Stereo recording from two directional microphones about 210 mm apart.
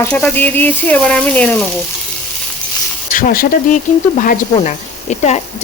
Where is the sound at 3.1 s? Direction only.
40° left (ahead or behind).